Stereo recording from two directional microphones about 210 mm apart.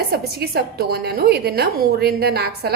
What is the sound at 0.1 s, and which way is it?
A woman's voice, 50° right (ahead or behind).